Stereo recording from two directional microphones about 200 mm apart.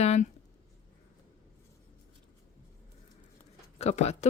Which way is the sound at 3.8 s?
35° left (ahead or behind).